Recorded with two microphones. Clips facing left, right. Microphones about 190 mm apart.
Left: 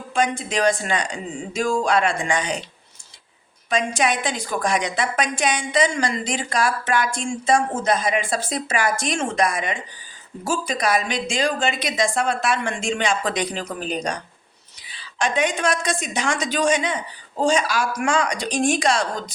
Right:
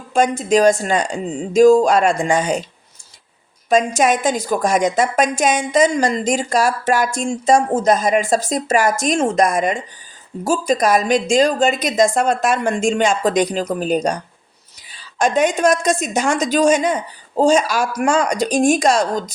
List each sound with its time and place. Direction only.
0.1 s a woman's voice: 45° right (ahead or behind)
3.7 s a woman's voice: 45° right (ahead or behind)